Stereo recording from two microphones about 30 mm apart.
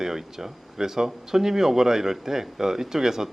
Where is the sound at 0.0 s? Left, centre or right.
Centre.